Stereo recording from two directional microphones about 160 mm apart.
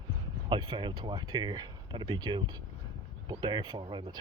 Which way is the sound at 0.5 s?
30° right (ahead or behind).